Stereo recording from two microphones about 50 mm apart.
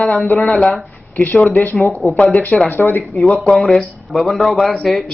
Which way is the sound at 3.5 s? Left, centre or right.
Centre.